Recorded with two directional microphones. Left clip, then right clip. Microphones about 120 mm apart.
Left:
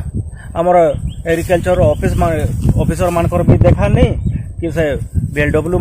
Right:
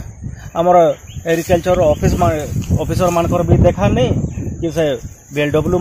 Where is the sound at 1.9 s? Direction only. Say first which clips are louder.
Even; 25° left (ahead or behind).